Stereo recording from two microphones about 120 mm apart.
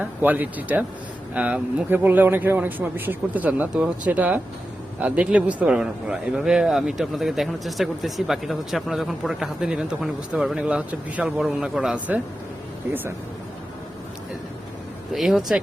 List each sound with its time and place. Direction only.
0.0 s a man's voice: 15° right (ahead or behind)
15.1 s speech: centre (ahead or behind)